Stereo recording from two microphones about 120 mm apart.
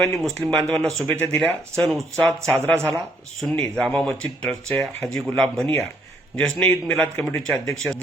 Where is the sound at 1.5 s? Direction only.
15° left (ahead or behind).